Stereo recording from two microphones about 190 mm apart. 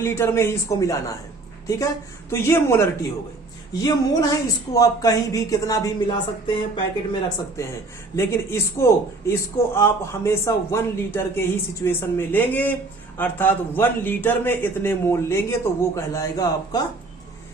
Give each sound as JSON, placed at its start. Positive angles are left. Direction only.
{"t": 0.0, "sound": "a man's voice", "side_deg": 15}
{"t": 2.3, "sound": "a man's voice", "side_deg": 15}
{"t": 8.1, "sound": "a man's voice", "side_deg": 15}